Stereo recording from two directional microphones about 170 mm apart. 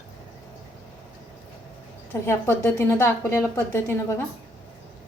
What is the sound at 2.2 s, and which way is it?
A woman's voice, 15° left (ahead or behind).